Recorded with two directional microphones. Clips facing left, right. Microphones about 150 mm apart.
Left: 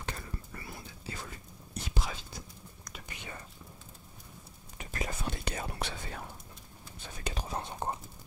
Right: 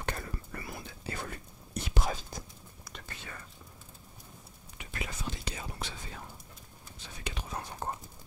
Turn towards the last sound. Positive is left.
turn(degrees=25)  # may be behind; listen again after turning